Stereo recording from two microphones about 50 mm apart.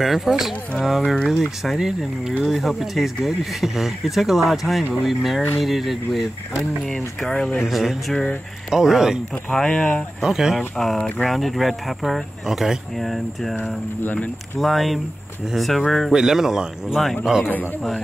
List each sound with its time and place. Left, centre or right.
0.0 s speech: centre
7.2 s speech: centre
7.6 s speech: centre
9.5 s speech: centre
10.2 s speech: centre
14.0 s speech: left
14.6 s speech: centre
16.1 s speech: centre
16.9 s speech: centre
17.2 s speech: centre